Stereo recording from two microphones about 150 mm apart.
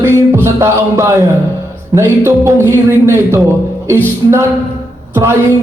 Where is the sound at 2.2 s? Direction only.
20° right (ahead or behind).